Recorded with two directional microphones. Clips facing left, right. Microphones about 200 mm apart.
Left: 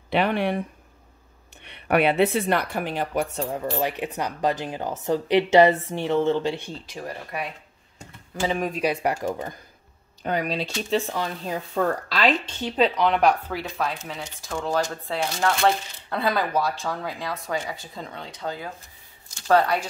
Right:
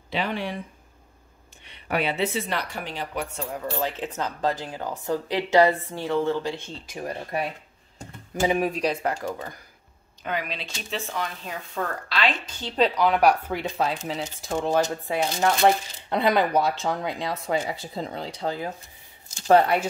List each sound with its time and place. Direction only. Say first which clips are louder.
0.1 s a woman's voice: left 6 dB; 60° left (ahead or behind); by 3.4 s 45° left (ahead or behind)
3.4 s speech: left 3 dB; 20° left (ahead or behind)
6.9 s speech: right 3 dB; 20° right (ahead or behind)
8.5 s speech: right 2 dB; 5° right (ahead or behind)
8.8 s speech: left 2 dB; 15° left (ahead or behind)
10.2 s speech: left 5 dB; 35° left (ahead or behind)
12.7 s speech: even; centre (ahead or behind)
13.5 s speech: right 2 dB; 20° right (ahead or behind)
19.2 s a sound: right 2 dB; 20° right (ahead or behind)